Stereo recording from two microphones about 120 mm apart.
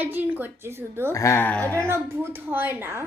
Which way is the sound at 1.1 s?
25° left (ahead or behind).